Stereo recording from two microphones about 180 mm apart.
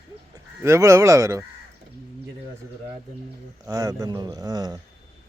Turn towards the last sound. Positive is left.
turn(degrees=-25)  # may be behind; listen again after turning